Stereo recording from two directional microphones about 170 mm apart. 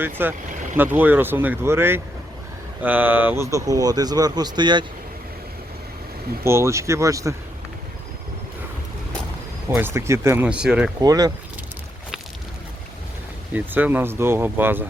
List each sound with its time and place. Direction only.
0.0 s speech: 10° right (ahead or behind)
0.5 s vehicle: 50° right (ahead or behind)
0.8 s speech: 10° right (ahead or behind); by 4.9 s 25° right (ahead or behind)
6.4 s speech: 15° right (ahead or behind)
9.6 s speech: 15° right (ahead or behind)
11.0 s speech: 20° right (ahead or behind)
13.5 s speech: 10° right (ahead or behind)